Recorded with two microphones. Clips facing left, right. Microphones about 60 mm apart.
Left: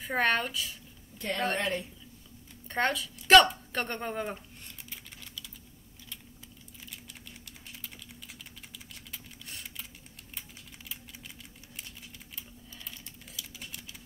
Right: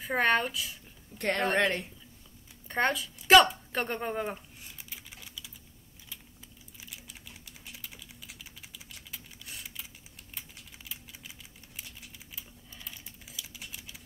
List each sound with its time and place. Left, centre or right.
0.0 s speech: centre
1.1 s a sound: right
1.6 s a woman's voice: right
2.7 s a sound: centre
7.4 s typing: centre
10.9 s typing: centre